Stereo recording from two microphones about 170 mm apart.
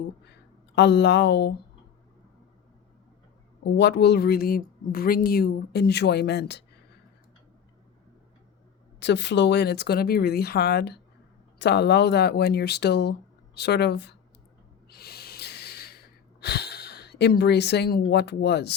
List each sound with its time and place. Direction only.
0.8 s a sound: 90° left
3.6 s speech: 90° left
9.0 s speech: 90° left; by 11.0 s 75° left (ahead or behind)
11.6 s speech: 85° left
13.6 s a sound: 75° left (ahead or behind)
14.8 s snort: 70° left (ahead or behind)
16.4 s speech: 75° left (ahead or behind)